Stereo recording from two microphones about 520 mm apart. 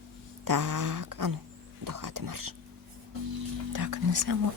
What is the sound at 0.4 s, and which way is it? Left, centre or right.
Speech, right.